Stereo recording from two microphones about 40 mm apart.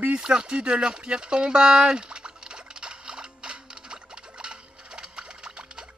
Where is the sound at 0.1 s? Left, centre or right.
Right.